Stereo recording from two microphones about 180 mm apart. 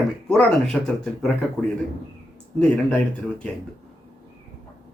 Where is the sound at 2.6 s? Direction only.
5° left (ahead or behind).